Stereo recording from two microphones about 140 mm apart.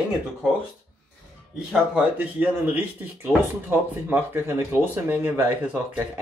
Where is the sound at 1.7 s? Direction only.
10° right (ahead or behind).